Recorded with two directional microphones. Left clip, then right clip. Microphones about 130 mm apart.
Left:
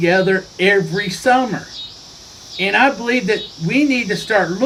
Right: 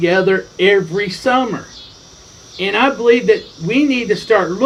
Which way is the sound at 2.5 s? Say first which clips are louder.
Left 1 dB; 25° left (ahead or behind).